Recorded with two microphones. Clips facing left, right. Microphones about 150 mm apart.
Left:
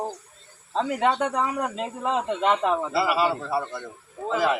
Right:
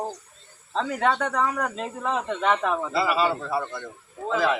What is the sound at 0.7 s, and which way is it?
Speech, 15° left (ahead or behind).